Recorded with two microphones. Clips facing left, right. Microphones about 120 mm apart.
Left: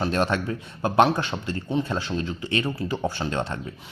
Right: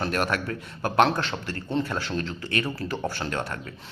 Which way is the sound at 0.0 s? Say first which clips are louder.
Left 3 dB; 25° left (ahead or behind).